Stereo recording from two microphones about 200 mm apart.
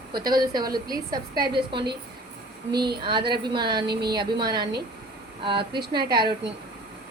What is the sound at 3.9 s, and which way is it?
Speech, 55° right (ahead or behind).